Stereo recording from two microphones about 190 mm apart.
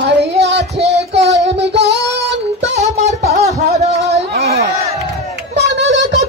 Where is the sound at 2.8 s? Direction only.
35° right (ahead or behind).